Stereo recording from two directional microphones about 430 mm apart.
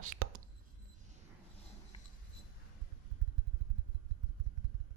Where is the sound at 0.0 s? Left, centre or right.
Right.